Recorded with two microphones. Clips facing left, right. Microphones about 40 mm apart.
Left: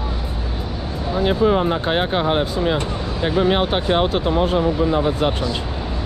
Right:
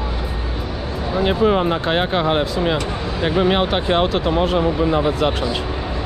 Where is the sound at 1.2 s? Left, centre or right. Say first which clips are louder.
Even; right.